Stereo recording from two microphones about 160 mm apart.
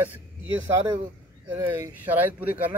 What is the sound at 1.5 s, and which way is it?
Speech, 15° right (ahead or behind).